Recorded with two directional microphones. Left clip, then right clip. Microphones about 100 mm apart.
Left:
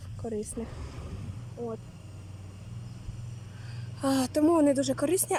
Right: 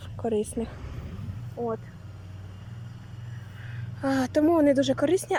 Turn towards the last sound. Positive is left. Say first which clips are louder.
# right 4 dB
turn(degrees=10)  # may be behind; listen again after turning